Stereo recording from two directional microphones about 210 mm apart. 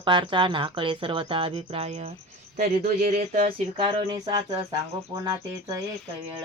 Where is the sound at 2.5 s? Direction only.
45° right (ahead or behind); by 5.1 s 20° right (ahead or behind).